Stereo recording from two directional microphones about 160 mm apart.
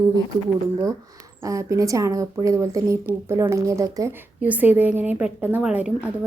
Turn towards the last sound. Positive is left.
turn(degrees=-10)  # may be behind; listen again after turning